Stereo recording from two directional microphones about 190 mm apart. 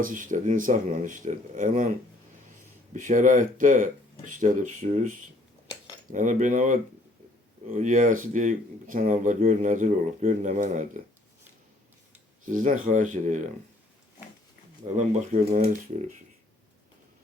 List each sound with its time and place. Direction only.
0.0 s speech: 45° right (ahead or behind)
2.9 s speech: 45° right (ahead or behind)
12.5 s speech: 45° right (ahead or behind)
14.8 s speech: 40° right (ahead or behind)